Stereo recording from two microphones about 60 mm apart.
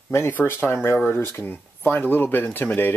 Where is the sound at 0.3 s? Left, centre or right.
Left.